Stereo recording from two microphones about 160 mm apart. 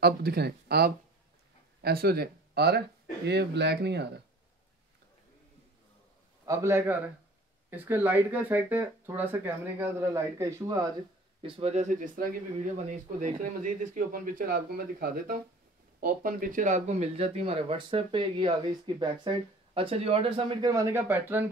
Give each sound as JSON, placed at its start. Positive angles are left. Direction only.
{"t": 0.0, "sound": "speech", "side_deg": -85}
{"t": 6.4, "sound": "speech", "side_deg": -20}
{"t": 11.4, "sound": "speech", "side_deg": -40}
{"t": 20.7, "sound": "speech", "side_deg": -15}